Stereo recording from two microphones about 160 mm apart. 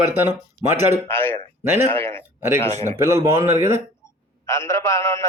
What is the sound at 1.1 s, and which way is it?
Speech, 15° left (ahead or behind).